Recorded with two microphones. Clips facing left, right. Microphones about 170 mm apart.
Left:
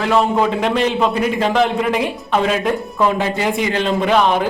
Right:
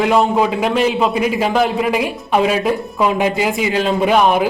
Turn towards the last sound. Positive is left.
turn(degrees=-10)  # may be behind; listen again after turning